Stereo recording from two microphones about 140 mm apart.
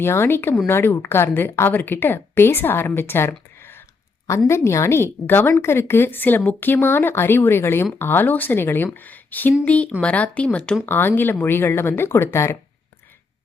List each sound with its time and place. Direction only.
0.0 s a woman's voice: 15° left (ahead or behind)